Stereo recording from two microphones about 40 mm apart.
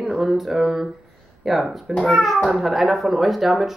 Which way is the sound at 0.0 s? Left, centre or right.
Centre.